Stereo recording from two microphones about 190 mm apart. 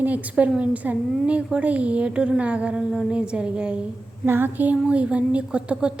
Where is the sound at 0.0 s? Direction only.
5° right (ahead or behind).